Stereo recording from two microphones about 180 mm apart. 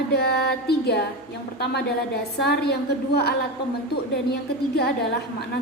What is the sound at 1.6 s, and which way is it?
Speech, 65° left (ahead or behind).